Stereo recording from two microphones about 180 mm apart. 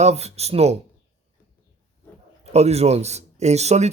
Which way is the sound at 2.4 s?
35° right (ahead or behind).